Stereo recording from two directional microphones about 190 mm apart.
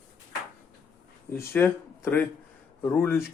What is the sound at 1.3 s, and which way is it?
Speech, 10° left (ahead or behind).